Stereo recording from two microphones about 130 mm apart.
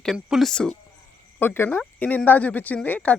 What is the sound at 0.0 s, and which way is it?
Speech, centre (ahead or behind).